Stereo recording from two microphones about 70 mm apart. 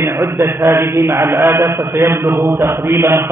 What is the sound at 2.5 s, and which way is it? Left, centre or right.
Speech, right.